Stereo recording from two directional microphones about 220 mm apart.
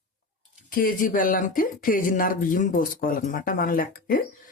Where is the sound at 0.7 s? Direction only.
40° left (ahead or behind).